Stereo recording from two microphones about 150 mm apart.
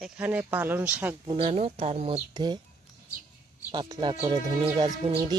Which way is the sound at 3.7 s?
30° right (ahead or behind).